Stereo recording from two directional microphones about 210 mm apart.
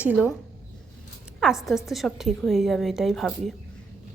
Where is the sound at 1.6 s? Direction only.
Centre (ahead or behind).